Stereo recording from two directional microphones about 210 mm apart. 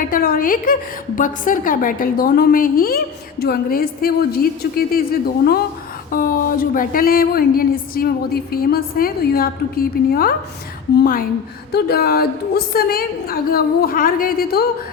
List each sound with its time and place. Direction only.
0.1 s speech: 45° left (ahead or behind)
6.1 s speech: 40° left (ahead or behind)